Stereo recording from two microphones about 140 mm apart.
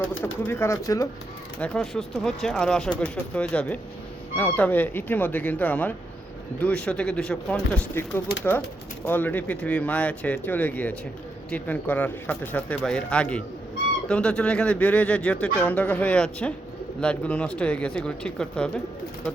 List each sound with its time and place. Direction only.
0.2 s speech: 15° left (ahead or behind)
1.5 s a man's voice: 5° left (ahead or behind)
9.0 s a man's voice: 10° left (ahead or behind)